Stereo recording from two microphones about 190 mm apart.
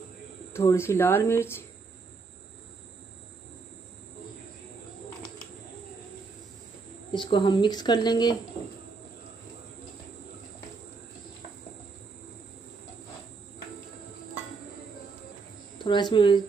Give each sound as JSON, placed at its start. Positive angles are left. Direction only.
{"t": 0.5, "sound": "speech", "side_deg": 15}
{"t": 7.1, "sound": "speech", "side_deg": 25}
{"t": 15.8, "sound": "speech", "side_deg": 25}